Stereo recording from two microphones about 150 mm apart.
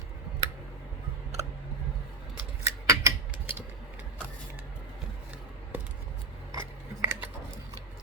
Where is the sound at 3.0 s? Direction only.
15° right (ahead or behind).